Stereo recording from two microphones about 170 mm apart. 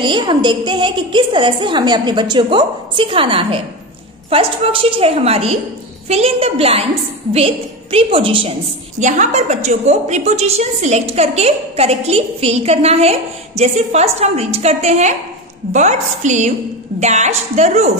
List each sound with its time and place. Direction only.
0.0 s a woman's voice: 30° right (ahead or behind)
9.0 s a woman's voice: 45° right (ahead or behind)